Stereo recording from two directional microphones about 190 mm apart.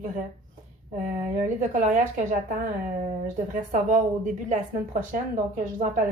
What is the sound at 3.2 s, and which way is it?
A woman's voice, 45° right (ahead or behind).